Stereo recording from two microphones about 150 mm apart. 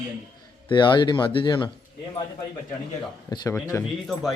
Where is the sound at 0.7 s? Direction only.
30° left (ahead or behind).